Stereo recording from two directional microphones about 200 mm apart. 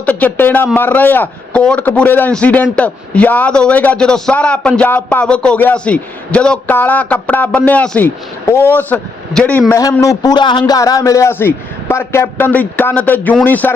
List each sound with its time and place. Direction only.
0.0 s a man's voice: 10° left (ahead or behind)